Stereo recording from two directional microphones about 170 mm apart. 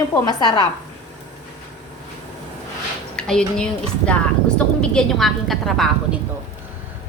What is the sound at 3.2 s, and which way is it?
A woman's voice, 5° left (ahead or behind).